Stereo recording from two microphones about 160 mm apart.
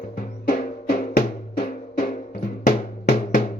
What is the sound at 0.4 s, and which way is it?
Music, 60° left (ahead or behind).